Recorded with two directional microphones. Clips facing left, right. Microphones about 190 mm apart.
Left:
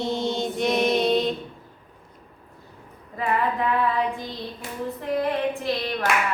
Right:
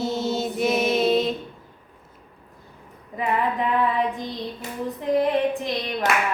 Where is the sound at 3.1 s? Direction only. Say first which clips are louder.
Right 1 dB; 20° right (ahead or behind).